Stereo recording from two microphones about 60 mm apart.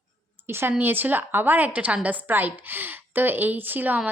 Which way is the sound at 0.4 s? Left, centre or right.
Right.